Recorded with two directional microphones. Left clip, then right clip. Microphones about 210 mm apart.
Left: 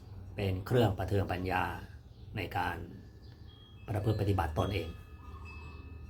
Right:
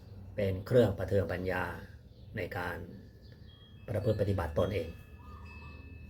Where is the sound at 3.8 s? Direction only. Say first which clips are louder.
Right 3 dB; 15° left (ahead or behind).